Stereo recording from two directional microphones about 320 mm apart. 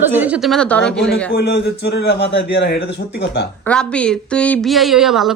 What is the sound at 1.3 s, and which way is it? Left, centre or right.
A man's voice, left.